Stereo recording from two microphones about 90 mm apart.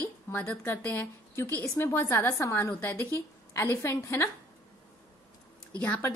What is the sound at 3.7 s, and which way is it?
Speech, 30° left (ahead or behind).